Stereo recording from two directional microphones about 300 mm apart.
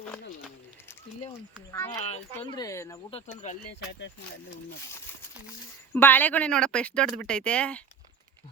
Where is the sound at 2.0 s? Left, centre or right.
Left.